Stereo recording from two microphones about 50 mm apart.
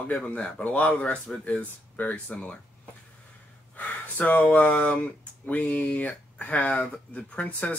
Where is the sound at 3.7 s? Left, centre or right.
Left.